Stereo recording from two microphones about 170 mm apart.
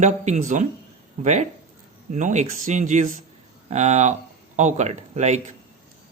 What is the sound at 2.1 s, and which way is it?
Speech, 45° right (ahead or behind).